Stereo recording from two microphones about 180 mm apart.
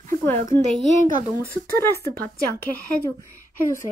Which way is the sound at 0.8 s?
40° left (ahead or behind).